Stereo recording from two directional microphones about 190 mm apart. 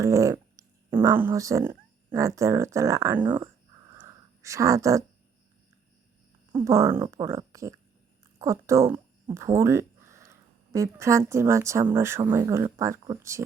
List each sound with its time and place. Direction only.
0.0 s speech: 15° right (ahead or behind)
3.9 s a sound: 15° right (ahead or behind)
6.5 s speech: 20° right (ahead or behind)